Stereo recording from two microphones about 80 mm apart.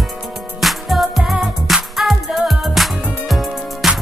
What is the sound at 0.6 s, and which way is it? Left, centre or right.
Music, centre.